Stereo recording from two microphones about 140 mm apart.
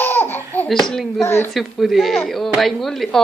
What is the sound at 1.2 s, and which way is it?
Laughter, 20° left (ahead or behind).